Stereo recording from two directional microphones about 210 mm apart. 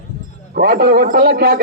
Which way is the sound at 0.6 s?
45° right (ahead or behind).